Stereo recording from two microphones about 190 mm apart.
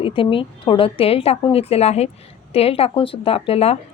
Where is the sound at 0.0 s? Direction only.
30° left (ahead or behind).